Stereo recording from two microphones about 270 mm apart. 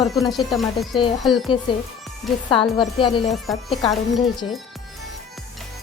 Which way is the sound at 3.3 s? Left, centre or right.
Centre.